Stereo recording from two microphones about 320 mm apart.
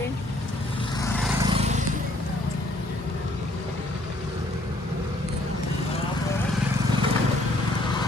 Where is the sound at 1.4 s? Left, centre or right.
Centre.